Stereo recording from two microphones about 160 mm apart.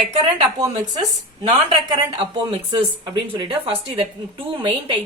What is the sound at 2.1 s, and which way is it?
Speech, 40° right (ahead or behind).